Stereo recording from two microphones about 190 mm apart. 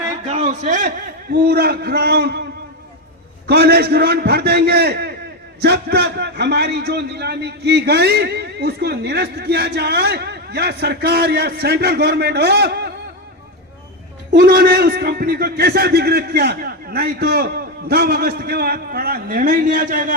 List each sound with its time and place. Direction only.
0.3 s a man's voice: 35° right (ahead or behind)
1.3 s a man's voice: 55° right (ahead or behind)
3.4 s a man's voice: 55° right (ahead or behind)
14.3 s a man's voice: 55° right (ahead or behind)